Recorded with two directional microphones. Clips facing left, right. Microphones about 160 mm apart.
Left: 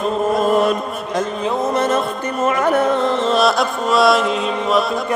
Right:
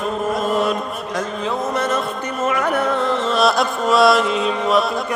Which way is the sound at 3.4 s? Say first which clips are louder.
Even; centre (ahead or behind).